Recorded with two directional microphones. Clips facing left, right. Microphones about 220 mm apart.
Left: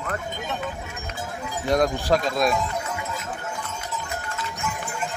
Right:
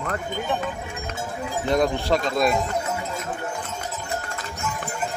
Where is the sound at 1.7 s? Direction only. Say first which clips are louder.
Left 1 dB; centre (ahead or behind).